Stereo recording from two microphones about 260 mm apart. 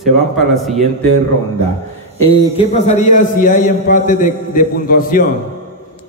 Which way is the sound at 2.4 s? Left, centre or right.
Left.